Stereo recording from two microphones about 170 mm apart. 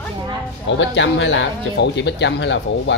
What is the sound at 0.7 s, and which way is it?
Speech, 90° left.